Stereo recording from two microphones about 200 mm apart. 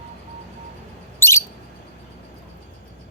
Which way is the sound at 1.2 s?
10° left (ahead or behind).